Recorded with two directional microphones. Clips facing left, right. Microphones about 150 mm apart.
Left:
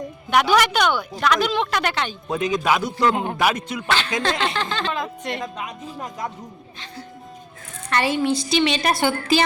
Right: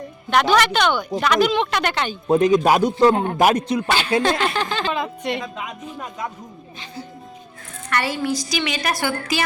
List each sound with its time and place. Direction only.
0.3 s speech: 10° left (ahead or behind)
2.2 s speech: 35° right (ahead or behind)
3.8 s speech: 10° right (ahead or behind)
7.9 s a woman's voice: 25° left (ahead or behind)